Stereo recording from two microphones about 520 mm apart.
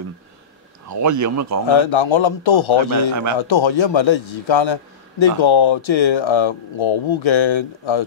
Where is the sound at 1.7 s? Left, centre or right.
Left.